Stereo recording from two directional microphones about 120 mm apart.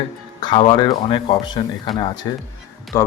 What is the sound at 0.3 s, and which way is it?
Music, 40° left (ahead or behind).